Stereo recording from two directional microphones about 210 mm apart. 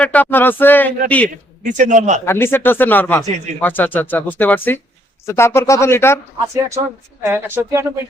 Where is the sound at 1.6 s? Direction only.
35° right (ahead or behind).